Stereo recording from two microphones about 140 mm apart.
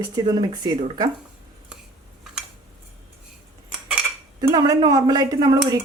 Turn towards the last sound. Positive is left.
turn(degrees=-25)  # may be behind; listen again after turning